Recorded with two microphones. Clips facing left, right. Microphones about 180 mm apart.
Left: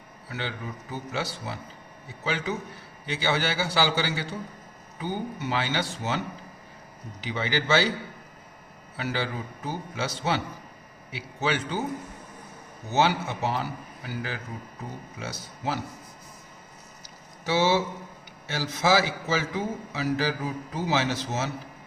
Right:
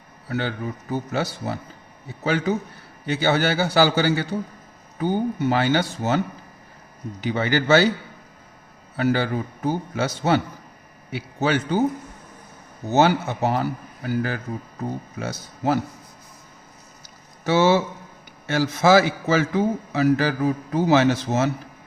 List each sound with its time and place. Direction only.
0.3 s a man's voice: 50° right (ahead or behind)
9.0 s a man's voice: 50° right (ahead or behind)
12.9 s a man's voice: 45° right (ahead or behind)
17.4 s a man's voice: 50° right (ahead or behind)